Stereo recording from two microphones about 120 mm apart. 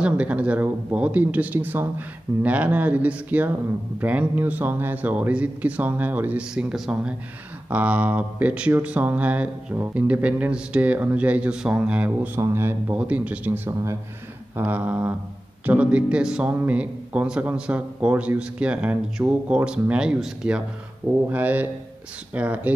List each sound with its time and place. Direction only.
0.0 s a man's voice: 10° right (ahead or behind)
12.4 s speech: 20° right (ahead or behind)
12.9 s a man's voice: 10° right (ahead or behind)
14.6 s a man's voice: 10° right (ahead or behind)